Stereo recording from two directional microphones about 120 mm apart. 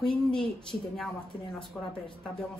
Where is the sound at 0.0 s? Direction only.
5° left (ahead or behind).